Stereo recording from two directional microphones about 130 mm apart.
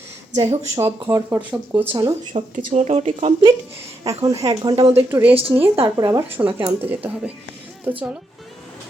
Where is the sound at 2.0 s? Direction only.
50° right (ahead or behind).